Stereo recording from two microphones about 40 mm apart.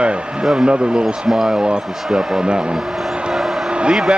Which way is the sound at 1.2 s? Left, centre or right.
Centre.